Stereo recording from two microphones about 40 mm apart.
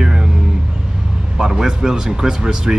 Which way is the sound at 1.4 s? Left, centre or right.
Centre.